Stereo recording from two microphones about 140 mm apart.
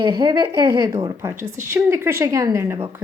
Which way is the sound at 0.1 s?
25° right (ahead or behind).